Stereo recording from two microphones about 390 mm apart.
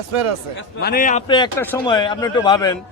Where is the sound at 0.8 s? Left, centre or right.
Left.